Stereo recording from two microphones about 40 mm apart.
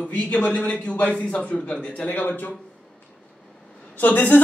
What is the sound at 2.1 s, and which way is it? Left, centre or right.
Speech, left.